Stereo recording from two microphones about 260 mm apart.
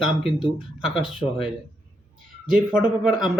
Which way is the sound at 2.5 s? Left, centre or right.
Centre.